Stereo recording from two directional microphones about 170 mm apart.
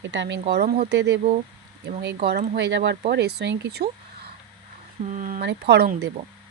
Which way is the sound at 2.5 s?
90° right.